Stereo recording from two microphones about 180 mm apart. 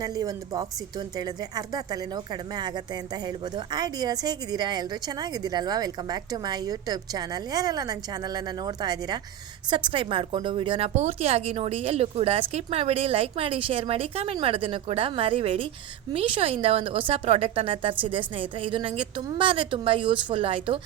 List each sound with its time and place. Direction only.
0.0 s a woman's voice: 20° right (ahead or behind)